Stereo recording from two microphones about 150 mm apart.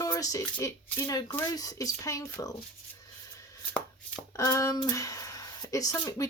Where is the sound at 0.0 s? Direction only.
25° left (ahead or behind).